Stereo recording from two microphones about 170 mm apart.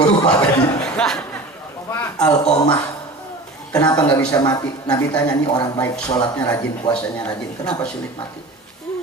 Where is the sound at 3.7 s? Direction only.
20° left (ahead or behind).